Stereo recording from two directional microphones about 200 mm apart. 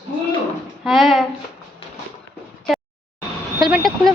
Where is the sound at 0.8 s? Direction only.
Centre (ahead or behind).